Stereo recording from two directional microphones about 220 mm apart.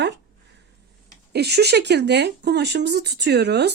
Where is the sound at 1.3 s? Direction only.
50° right (ahead or behind).